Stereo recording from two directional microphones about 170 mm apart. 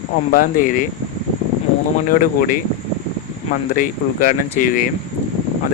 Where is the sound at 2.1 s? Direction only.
55° left (ahead or behind).